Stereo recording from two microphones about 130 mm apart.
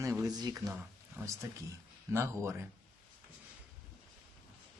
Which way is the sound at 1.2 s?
20° right (ahead or behind).